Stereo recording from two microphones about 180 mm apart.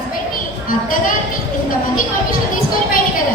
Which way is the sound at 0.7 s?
50° left (ahead or behind).